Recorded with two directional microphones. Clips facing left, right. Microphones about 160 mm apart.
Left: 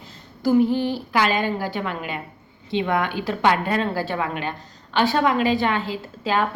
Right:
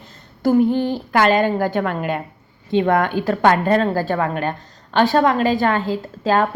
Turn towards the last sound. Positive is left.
turn(degrees=-45)  # may be behind; listen again after turning